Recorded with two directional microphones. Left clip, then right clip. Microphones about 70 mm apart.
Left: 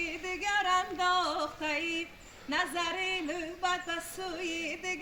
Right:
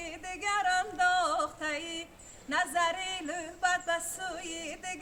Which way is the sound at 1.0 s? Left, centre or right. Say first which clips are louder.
Right 4 dB; right.